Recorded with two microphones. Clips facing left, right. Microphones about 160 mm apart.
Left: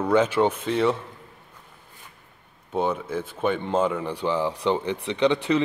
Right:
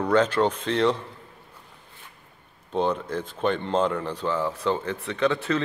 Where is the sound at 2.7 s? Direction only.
5° left (ahead or behind).